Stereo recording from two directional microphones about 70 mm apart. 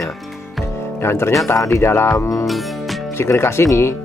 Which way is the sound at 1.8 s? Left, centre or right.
Left.